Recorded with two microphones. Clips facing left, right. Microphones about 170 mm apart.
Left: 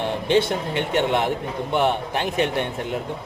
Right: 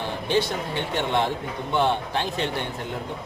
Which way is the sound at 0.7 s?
15° left (ahead or behind).